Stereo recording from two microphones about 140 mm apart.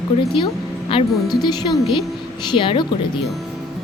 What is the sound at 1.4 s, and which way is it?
Music, 30° left (ahead or behind).